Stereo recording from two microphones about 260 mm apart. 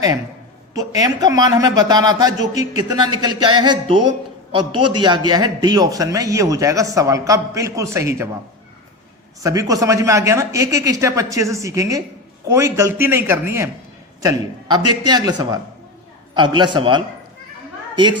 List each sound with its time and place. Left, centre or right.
0.7 s a man's voice: centre
9.4 s a man's voice: centre